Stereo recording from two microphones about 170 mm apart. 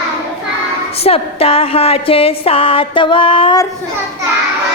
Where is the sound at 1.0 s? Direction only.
35° left (ahead or behind).